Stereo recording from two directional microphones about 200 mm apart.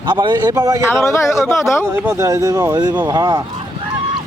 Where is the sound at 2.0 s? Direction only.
15° right (ahead or behind).